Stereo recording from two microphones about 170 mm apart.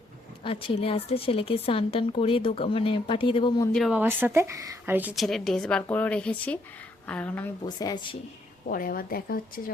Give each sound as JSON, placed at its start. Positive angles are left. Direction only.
{"t": 0.4, "sound": "a woman's voice", "side_deg": 35}
{"t": 3.7, "sound": "a woman's voice", "side_deg": 0}
{"t": 3.9, "sound": "a woman's voice", "side_deg": -10}
{"t": 7.6, "sound": "a woman's voice", "side_deg": 25}
{"t": 8.7, "sound": "a woman's voice", "side_deg": 60}